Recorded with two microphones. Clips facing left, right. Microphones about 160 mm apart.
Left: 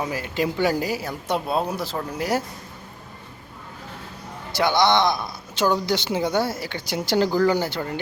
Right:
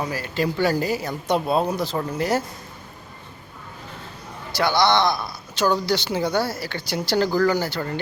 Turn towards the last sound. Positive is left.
turn(degrees=25)  # may be behind; listen again after turning